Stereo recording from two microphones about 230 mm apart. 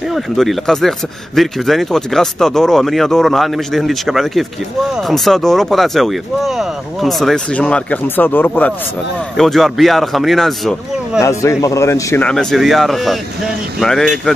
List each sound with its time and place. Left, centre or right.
0.1 s speech: centre
11.1 s speech: centre